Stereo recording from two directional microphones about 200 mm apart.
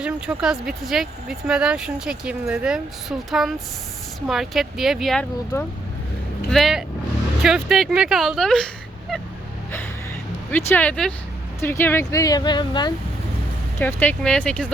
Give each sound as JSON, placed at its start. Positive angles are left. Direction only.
{"t": 0.0, "sound": "speech", "side_deg": -5}
{"t": 5.5, "sound": "speech", "side_deg": 15}
{"t": 6.5, "sound": "speech", "side_deg": 0}
{"t": 10.7, "sound": "speech", "side_deg": 10}
{"t": 13.7, "sound": "speech", "side_deg": 10}